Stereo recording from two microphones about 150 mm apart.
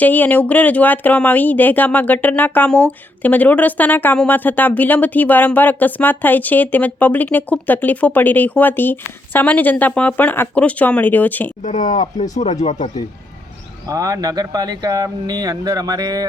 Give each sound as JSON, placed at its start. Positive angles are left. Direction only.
{"t": 0.0, "sound": "speech", "side_deg": 10}
{"t": 11.6, "sound": "speech", "side_deg": 55}
{"t": 13.8, "sound": "speech", "side_deg": -25}